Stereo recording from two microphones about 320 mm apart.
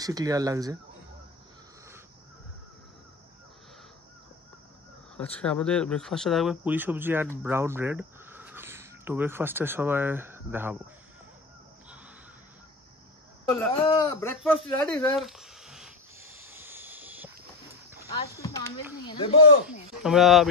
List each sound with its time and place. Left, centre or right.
0.0 s speech: centre
5.1 s speech: centre
13.5 s speech: centre
14.9 s a sound: centre
18.3 s speech: centre
19.6 s speech: centre